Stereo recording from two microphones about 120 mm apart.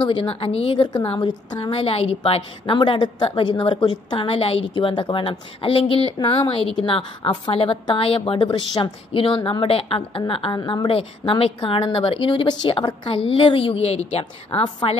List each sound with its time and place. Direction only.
0.0 s a woman's voice: 45° left (ahead or behind)
4.3 s a woman's voice: 55° left (ahead or behind)
10.9 s a woman's voice: 50° left (ahead or behind)